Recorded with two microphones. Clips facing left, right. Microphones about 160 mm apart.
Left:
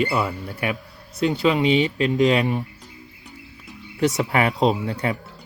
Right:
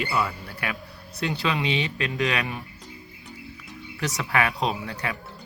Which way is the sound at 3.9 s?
25° left (ahead or behind).